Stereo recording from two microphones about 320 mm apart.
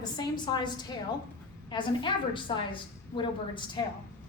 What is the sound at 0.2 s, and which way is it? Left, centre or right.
A woman's voice, centre.